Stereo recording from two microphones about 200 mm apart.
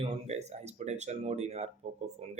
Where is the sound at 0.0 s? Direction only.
30° right (ahead or behind).